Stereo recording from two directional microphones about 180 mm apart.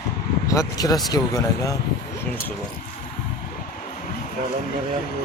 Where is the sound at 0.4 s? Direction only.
20° left (ahead or behind).